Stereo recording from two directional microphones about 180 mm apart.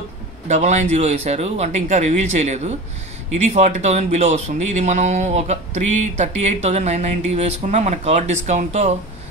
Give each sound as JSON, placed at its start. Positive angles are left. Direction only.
{"t": 0.5, "sound": "speech", "side_deg": -40}